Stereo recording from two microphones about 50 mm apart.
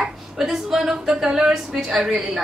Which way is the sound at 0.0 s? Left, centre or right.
Centre.